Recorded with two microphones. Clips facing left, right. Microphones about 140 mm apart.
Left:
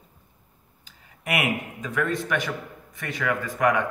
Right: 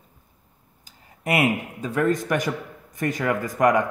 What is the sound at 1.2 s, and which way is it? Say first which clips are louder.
Speech: right 4 dB; 35° right (ahead or behind).